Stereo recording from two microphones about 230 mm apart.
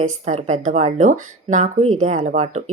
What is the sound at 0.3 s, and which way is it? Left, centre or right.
Speech, right.